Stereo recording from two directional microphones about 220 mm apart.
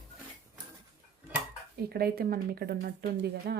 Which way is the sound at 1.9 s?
45° right (ahead or behind).